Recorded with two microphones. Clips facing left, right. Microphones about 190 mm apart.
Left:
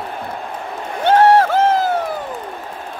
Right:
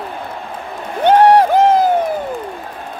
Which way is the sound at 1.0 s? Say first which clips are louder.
Right 2 dB; 15° right (ahead or behind).